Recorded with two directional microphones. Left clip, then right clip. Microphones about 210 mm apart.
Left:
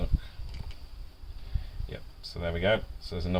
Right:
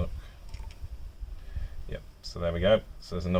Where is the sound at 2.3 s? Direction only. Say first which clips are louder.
Right 3 dB; 25° right (ahead or behind).